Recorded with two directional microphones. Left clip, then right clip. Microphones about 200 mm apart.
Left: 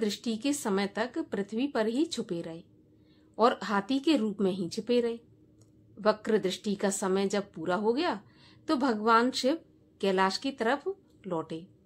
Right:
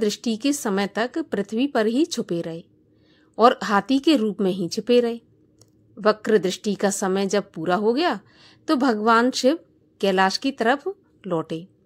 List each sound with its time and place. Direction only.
0.0 s a woman's voice: 30° right (ahead or behind)